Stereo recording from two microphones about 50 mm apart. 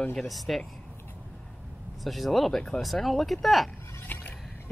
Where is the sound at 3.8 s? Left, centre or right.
Left.